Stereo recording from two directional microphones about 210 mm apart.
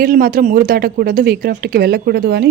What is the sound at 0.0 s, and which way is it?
Speech, 45° right (ahead or behind).